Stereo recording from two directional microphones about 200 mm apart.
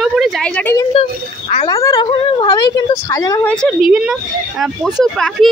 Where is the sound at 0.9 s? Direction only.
35° left (ahead or behind).